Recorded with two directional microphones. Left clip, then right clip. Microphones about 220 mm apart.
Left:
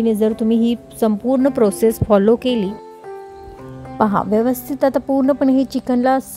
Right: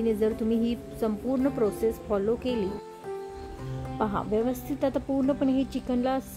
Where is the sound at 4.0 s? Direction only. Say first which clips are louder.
Left 11 dB; 35° left (ahead or behind).